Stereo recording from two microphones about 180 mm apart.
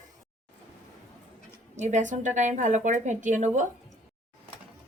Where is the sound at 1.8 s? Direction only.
40° right (ahead or behind).